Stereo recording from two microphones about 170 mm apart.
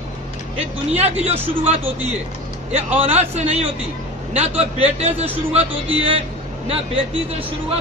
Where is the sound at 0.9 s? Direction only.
35° right (ahead or behind).